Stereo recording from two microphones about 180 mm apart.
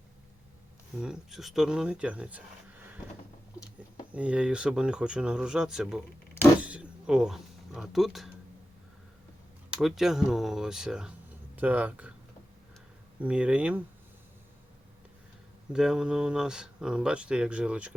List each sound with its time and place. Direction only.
0.9 s speech: 5° right (ahead or behind)
4.1 s speech: 5° right (ahead or behind)
6.6 s a sound: 5° right (ahead or behind)
9.6 s speech: 5° right (ahead or behind)
13.2 s speech: 5° right (ahead or behind)
15.7 s speech: 5° right (ahead or behind)